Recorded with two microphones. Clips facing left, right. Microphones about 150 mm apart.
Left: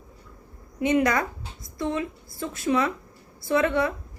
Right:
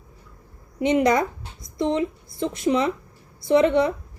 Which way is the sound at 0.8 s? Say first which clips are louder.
Right 3 dB; 20° right (ahead or behind).